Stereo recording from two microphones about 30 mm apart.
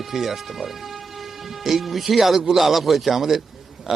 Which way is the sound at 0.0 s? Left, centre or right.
Centre.